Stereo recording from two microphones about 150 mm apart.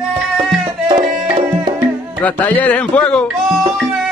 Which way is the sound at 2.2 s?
10° left (ahead or behind).